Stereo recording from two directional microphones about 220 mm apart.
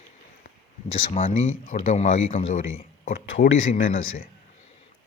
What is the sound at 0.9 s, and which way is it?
Speech, 35° left (ahead or behind).